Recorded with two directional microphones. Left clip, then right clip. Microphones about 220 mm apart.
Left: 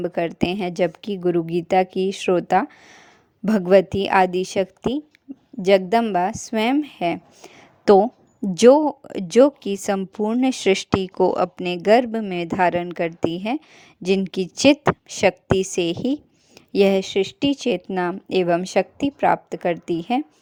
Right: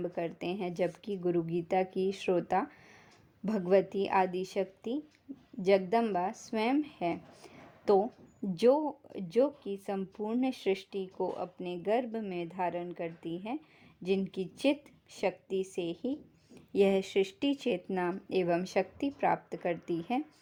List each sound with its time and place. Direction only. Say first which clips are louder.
0.0 s a woman's voice: left 13 dB; 30° left (ahead or behind)
5.3 s a sound: left 9 dB; 30° left (ahead or behind)
5.6 s a woman's voice: left 11 dB; 30° left (ahead or behind)